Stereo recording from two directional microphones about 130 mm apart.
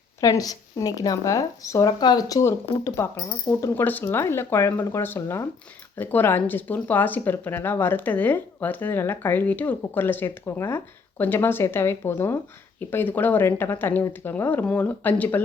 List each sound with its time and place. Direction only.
0.2 s speech: 25° left (ahead or behind)